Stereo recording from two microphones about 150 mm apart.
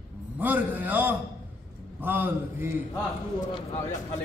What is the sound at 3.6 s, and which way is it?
Speech, 45° left (ahead or behind).